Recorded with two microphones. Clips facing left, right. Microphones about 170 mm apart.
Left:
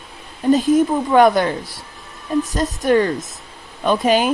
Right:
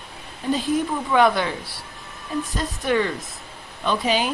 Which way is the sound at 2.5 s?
45° left (ahead or behind).